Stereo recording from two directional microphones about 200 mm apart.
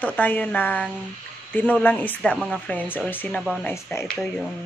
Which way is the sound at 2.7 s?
10° left (ahead or behind).